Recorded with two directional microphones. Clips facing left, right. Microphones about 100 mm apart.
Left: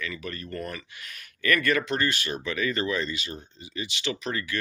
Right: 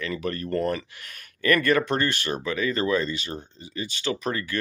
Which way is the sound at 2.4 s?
30° right (ahead or behind).